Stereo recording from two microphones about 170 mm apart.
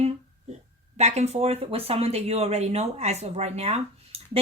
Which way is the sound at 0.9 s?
40° right (ahead or behind).